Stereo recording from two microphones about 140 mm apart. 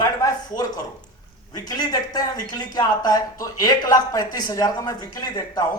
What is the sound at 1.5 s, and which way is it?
Speech, 25° left (ahead or behind).